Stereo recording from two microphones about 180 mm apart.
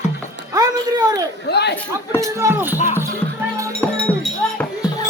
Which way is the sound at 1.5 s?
65° left (ahead or behind).